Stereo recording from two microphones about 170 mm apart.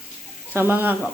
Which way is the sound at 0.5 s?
10° right (ahead or behind).